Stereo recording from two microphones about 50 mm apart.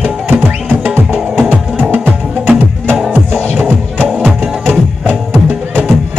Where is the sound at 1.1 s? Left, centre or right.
Right.